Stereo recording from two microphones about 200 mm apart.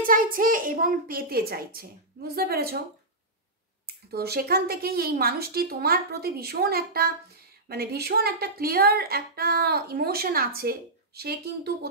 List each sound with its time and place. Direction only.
0.0 s speech: 45° right (ahead or behind)
3.8 s speech: 50° right (ahead or behind)